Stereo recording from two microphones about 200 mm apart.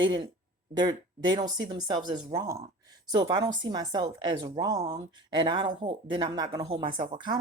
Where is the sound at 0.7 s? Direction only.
20° right (ahead or behind).